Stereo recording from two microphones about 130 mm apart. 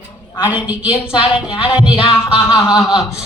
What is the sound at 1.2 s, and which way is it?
Speech, 45° left (ahead or behind).